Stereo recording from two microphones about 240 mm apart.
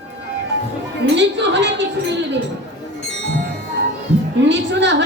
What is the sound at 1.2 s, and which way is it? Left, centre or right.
Speech, right.